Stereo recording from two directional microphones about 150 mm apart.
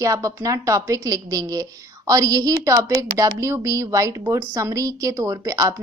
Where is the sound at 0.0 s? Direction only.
20° right (ahead or behind).